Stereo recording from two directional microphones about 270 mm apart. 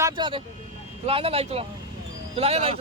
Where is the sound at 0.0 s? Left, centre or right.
Centre.